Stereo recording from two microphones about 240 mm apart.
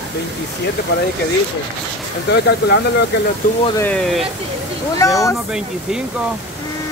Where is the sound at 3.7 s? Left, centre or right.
Centre.